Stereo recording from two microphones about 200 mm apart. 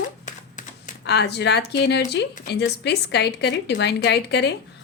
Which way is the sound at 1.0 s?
55° left (ahead or behind).